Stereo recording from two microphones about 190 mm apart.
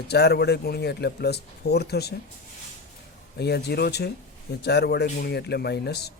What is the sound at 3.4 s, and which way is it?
A man's voice, 60° left (ahead or behind).